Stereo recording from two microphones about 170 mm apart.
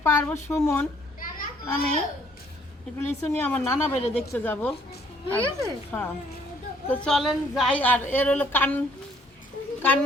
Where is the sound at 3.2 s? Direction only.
10° left (ahead or behind).